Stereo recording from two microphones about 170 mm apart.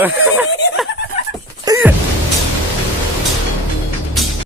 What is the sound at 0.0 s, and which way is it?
Speech, 10° right (ahead or behind).